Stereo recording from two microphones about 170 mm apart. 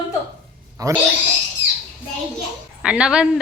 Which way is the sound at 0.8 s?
20° right (ahead or behind).